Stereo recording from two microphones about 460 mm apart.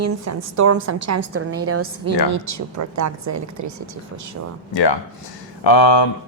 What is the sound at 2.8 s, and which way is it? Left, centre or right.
Speech, right.